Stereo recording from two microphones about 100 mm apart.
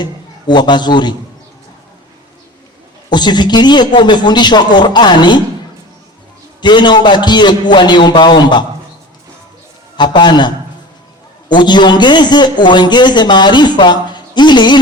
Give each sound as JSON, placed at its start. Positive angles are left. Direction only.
{"t": 0.0, "sound": "a man's voice", "side_deg": 45}
{"t": 3.1, "sound": "a man's voice", "side_deg": 45}
{"t": 6.6, "sound": "a man's voice", "side_deg": 50}
{"t": 10.0, "sound": "a man's voice", "side_deg": 50}